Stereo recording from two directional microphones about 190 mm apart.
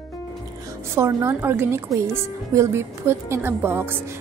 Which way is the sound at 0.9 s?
15° right (ahead or behind).